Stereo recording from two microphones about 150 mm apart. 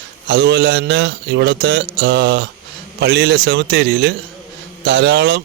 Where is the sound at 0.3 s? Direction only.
90° right.